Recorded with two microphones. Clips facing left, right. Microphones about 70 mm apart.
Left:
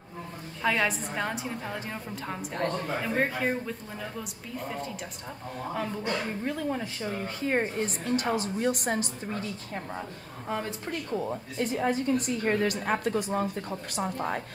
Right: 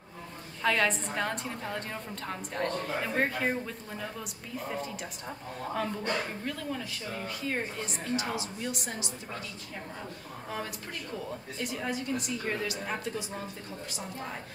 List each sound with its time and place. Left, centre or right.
0.6 s a woman's voice: centre
6.4 s a woman's voice: left
10.5 s a woman's voice: left